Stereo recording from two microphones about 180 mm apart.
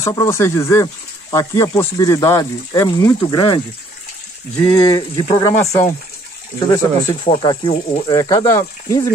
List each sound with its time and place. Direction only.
0.0 s speech: 20° left (ahead or behind)
7.2 s speech: 35° left (ahead or behind); by 9.0 s 15° left (ahead or behind)